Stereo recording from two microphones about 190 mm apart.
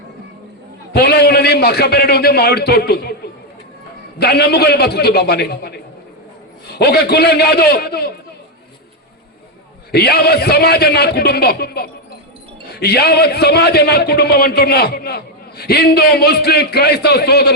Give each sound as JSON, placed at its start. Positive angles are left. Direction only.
{"t": 0.9, "sound": "a man's voice", "side_deg": 60}
{"t": 4.2, "sound": "a man's voice", "side_deg": 60}
{"t": 6.7, "sound": "a man's voice", "side_deg": 55}
{"t": 9.9, "sound": "a man's voice", "side_deg": 55}